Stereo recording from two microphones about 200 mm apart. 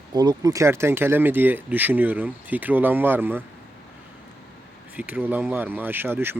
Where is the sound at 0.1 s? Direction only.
20° right (ahead or behind).